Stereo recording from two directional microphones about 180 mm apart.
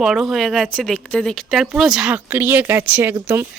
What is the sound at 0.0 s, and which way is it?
Speech, centre (ahead or behind).